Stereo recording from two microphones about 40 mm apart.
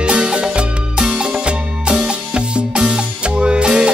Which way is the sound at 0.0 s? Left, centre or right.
Right.